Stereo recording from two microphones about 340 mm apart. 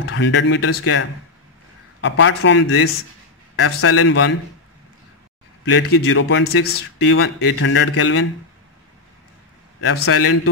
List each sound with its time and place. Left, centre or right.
0.0 s a man's voice: left
5.7 s a man's voice: left
9.8 s a man's voice: left